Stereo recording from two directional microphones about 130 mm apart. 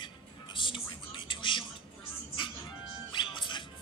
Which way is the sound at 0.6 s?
40° left (ahead or behind).